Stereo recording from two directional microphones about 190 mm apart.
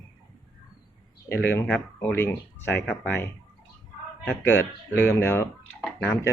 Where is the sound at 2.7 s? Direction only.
65° left (ahead or behind).